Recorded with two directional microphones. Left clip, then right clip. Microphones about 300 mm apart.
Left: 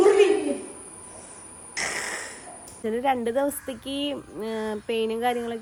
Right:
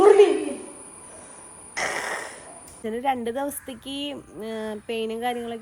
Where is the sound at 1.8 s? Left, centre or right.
Centre.